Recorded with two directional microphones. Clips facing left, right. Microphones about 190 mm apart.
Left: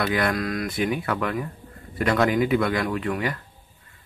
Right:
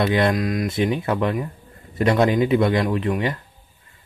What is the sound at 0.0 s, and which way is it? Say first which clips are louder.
A man's voice: right 4 dB; 25° right (ahead or behind).